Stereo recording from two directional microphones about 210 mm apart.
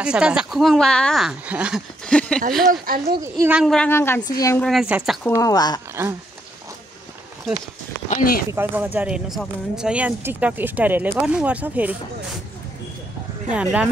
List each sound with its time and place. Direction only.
0.0 s speech: 5° right (ahead or behind)
2.7 s speech: 45° right (ahead or behind)
3.2 s speech: 15° right (ahead or behind)
3.5 s speech: centre (ahead or behind)
4.6 s speech: centre (ahead or behind)
5.3 s speech: 15° left (ahead or behind)
6.0 s speech: 10° right (ahead or behind)
8.1 s speech: 40° left (ahead or behind)
8.5 s speech: 10° right (ahead or behind)
13.5 s speech: 5° right (ahead or behind)